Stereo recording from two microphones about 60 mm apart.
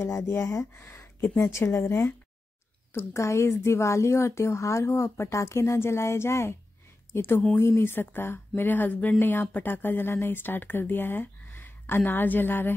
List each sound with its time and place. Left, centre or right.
0.0 s speech: left
0.8 s a sound: left
1.5 s speech: left
1.8 s speech: left
2.9 s speech: left